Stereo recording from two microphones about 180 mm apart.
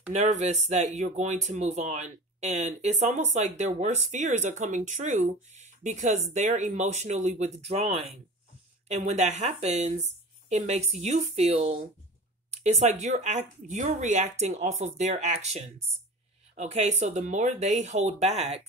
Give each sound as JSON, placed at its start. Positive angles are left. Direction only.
{"t": 0.1, "sound": "speech", "side_deg": -40}
{"t": 12.4, "sound": "a sound", "side_deg": -40}
{"t": 13.0, "sound": "speech", "side_deg": -40}